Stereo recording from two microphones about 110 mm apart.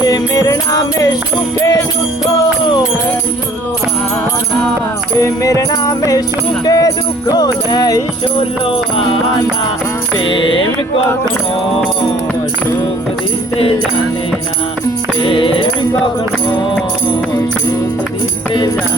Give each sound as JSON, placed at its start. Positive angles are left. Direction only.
{"t": 0.0, "sound": "music", "side_deg": 30}
{"t": 5.2, "sound": "music", "side_deg": 30}
{"t": 8.4, "sound": "music", "side_deg": 55}
{"t": 10.2, "sound": "music", "side_deg": 50}
{"t": 15.2, "sound": "music", "side_deg": 50}